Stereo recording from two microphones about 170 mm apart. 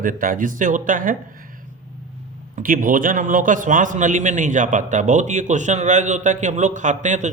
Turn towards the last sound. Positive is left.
turn(degrees=-45)  # may be behind; listen again after turning